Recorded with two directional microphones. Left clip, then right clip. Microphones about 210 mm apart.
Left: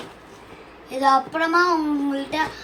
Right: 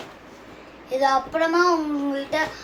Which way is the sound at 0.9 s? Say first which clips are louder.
Left 2 dB; 20° right (ahead or behind).